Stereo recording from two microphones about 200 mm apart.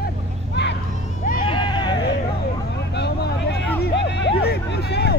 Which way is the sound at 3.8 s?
60° left (ahead or behind).